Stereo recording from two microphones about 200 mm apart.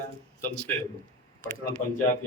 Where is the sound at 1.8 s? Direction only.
40° left (ahead or behind).